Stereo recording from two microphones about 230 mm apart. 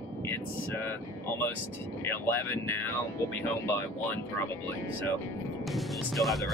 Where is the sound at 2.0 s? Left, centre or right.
Centre.